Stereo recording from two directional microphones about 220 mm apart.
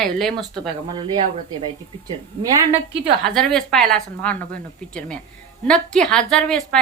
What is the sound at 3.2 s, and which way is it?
A woman's voice, centre (ahead or behind).